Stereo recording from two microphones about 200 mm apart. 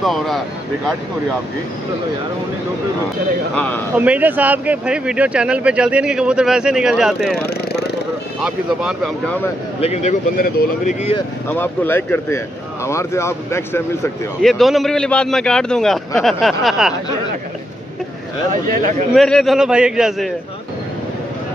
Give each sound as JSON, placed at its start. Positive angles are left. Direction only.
{"t": 0.0, "sound": "speech", "side_deg": 0}
{"t": 3.5, "sound": "speech", "side_deg": 5}
{"t": 3.9, "sound": "speech", "side_deg": -5}
{"t": 8.4, "sound": "speech", "side_deg": -5}
{"t": 9.8, "sound": "speech", "side_deg": 30}
{"t": 11.4, "sound": "speech", "side_deg": 10}
{"t": 14.4, "sound": "speech", "side_deg": 0}
{"t": 19.1, "sound": "speech", "side_deg": 0}